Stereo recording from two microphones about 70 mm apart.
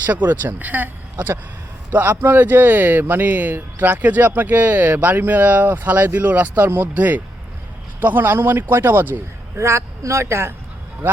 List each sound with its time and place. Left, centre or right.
0.0 s speech: right
1.9 s a man's voice: right
9.6 s a man's voice: right
11.0 s speech: right